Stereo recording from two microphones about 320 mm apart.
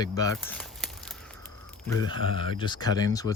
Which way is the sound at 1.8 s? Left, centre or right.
Centre.